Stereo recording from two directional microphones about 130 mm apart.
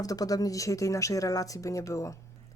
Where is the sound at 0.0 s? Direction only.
30° left (ahead or behind).